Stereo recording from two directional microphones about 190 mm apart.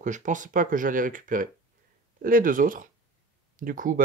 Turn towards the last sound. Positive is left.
turn(degrees=-45)  # may be behind; listen again after turning